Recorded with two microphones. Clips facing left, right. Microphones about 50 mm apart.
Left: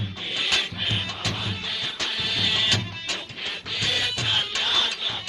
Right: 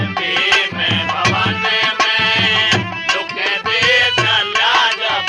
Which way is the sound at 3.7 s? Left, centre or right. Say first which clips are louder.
Right 13 dB; right.